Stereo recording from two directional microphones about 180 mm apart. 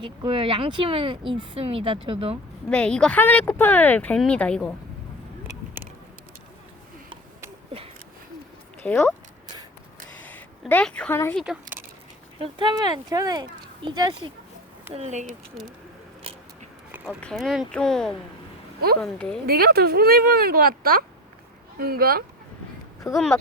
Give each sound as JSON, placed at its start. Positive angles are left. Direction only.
{"t": 0.0, "sound": "speech", "side_deg": -30}
{"t": 2.6, "sound": "speech", "side_deg": 5}
{"t": 8.8, "sound": "speech", "side_deg": 10}
{"t": 10.2, "sound": "speech", "side_deg": 10}
{"t": 12.4, "sound": "speech", "side_deg": -25}
{"t": 14.9, "sound": "speech", "side_deg": -40}
{"t": 17.1, "sound": "speech", "side_deg": 5}
{"t": 19.5, "sound": "speech", "side_deg": -60}